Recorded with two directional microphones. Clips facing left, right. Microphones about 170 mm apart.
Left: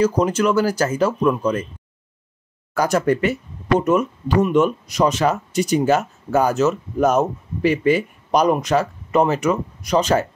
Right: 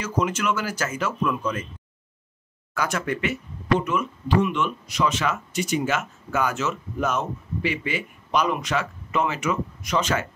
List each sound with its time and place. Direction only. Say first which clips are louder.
0.0 s speech: left 8 dB; 35° left (ahead or behind)
2.7 s speech: left 9 dB; 40° left (ahead or behind)